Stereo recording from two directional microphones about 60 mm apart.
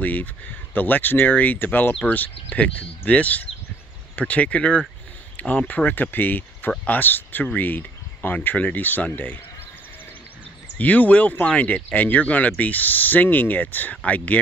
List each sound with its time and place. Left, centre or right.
0.0 s speech: left
10.8 s speech: left